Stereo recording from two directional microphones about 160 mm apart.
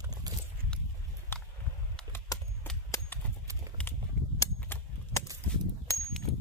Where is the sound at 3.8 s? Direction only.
5° left (ahead or behind).